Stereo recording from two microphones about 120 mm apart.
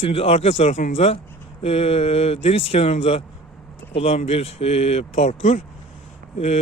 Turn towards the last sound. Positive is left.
turn(degrees=65)  # may be behind; listen again after turning